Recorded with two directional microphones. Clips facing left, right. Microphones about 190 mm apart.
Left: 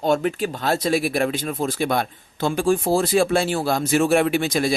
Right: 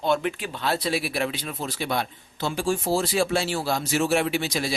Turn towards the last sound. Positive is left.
turn(degrees=50)  # may be behind; listen again after turning